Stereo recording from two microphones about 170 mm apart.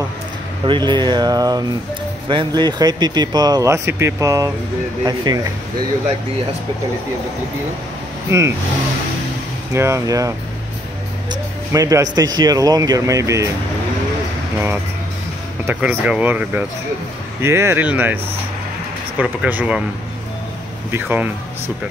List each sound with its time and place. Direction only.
0.7 s speech: 25° right (ahead or behind)
8.3 s speech: 15° right (ahead or behind)
9.8 s speech: 15° right (ahead or behind)
11.7 s speech: 20° right (ahead or behind)
15.6 s speech: 10° right (ahead or behind)
20.9 s speech: 10° right (ahead or behind)